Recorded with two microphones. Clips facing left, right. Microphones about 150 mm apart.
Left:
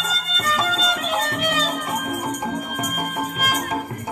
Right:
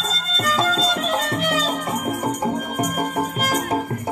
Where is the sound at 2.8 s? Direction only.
35° right (ahead or behind).